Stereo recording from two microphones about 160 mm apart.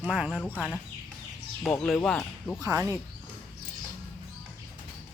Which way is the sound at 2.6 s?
20° right (ahead or behind).